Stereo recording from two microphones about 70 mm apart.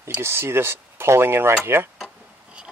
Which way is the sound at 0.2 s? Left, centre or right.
Right.